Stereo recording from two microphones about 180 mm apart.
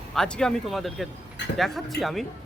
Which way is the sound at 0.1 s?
5° left (ahead or behind).